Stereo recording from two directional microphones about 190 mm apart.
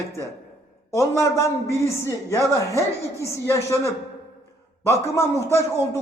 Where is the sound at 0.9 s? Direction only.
15° left (ahead or behind).